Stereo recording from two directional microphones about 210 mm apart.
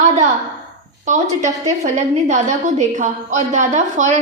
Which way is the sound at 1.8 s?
35° right (ahead or behind).